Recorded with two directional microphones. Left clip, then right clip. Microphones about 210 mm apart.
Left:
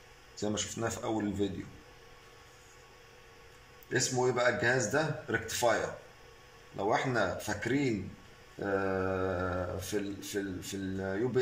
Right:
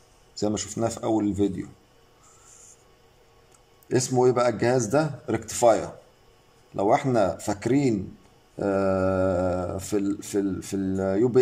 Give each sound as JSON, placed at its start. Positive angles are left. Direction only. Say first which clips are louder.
{"t": 0.4, "sound": "speech", "louder": "right 8 dB", "side_deg": -25}
{"t": 4.2, "sound": "speech", "louder": "right 8 dB", "side_deg": -30}
{"t": 6.8, "sound": "speech", "louder": "right 9 dB", "side_deg": -30}